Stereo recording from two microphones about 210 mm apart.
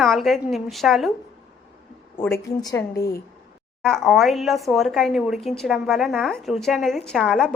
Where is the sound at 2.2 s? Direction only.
15° left (ahead or behind).